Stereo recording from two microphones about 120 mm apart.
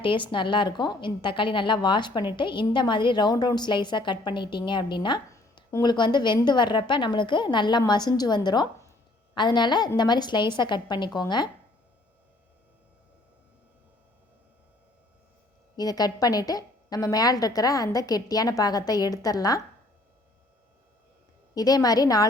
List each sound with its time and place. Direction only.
0.0 s a woman's voice: 45° left (ahead or behind)
15.7 s a woman's voice: 35° left (ahead or behind)
21.5 s a woman's voice: 30° left (ahead or behind)